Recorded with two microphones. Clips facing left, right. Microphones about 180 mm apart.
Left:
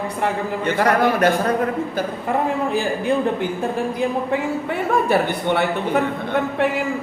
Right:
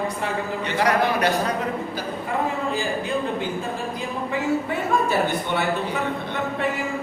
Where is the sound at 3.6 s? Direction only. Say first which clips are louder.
Left 7 dB; 60° left (ahead or behind).